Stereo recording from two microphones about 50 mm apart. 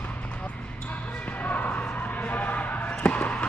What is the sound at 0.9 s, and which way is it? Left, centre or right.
Basketball bounce, left.